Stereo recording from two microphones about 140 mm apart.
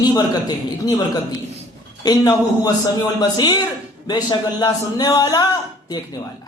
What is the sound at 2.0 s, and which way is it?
A man's voice, 30° left (ahead or behind).